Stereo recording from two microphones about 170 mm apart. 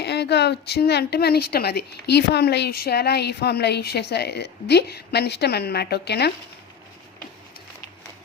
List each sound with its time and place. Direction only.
0.0 s a woman's voice: 80° left